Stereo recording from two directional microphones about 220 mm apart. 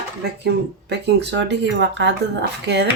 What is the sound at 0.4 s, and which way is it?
Speech, 50° right (ahead or behind).